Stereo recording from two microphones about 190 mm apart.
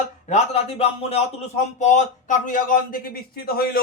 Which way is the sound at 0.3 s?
35° left (ahead or behind).